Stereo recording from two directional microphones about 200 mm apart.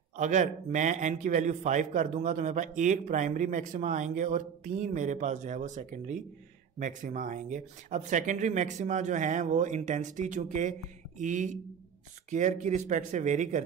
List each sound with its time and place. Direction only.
0.2 s a man's voice: 40° right (ahead or behind)